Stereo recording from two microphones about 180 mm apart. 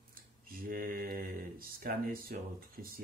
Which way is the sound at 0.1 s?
55° right (ahead or behind).